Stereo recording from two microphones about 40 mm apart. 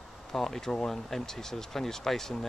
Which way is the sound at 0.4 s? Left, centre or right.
Centre.